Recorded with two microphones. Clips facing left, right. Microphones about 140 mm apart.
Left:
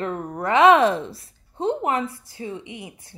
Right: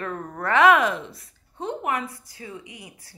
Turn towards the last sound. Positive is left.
turn(degrees=25)  # may be behind; listen again after turning